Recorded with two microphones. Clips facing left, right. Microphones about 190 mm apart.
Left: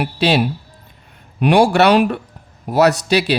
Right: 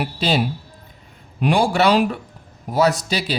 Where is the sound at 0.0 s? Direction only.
70° left (ahead or behind).